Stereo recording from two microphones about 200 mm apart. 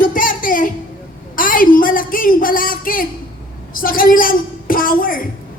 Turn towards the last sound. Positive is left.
turn(degrees=45)  # may be behind; listen again after turning